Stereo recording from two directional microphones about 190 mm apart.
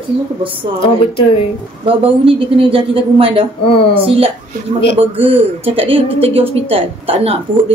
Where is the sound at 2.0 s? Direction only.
30° right (ahead or behind).